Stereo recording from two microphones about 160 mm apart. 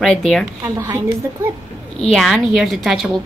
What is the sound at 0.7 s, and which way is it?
Speech, 20° right (ahead or behind).